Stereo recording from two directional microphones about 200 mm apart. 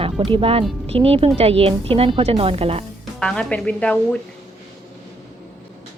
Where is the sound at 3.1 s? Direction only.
5° left (ahead or behind).